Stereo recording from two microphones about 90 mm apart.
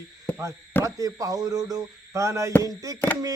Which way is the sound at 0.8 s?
40° right (ahead or behind).